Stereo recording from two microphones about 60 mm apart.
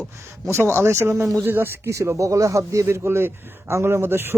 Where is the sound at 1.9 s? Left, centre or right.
Right.